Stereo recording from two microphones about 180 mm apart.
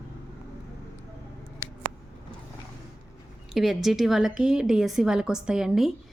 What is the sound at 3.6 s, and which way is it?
A woman's voice, centre (ahead or behind).